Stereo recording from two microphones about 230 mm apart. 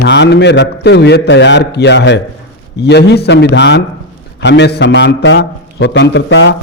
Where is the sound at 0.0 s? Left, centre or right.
Left.